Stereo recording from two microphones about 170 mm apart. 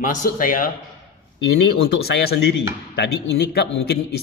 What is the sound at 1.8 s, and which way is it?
Speech, 70° left (ahead or behind).